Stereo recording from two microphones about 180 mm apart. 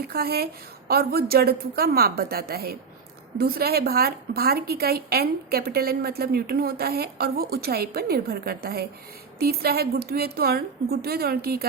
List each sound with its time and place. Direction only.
0.1 s a woman's voice: 60° right (ahead or behind)